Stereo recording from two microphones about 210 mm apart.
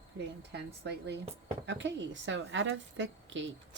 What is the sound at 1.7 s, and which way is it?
A woman's voice, 60° right (ahead or behind).